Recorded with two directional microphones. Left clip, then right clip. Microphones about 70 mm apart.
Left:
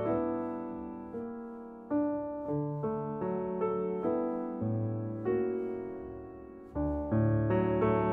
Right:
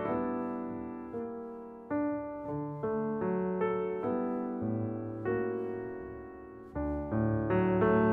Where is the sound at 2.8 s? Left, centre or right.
Left.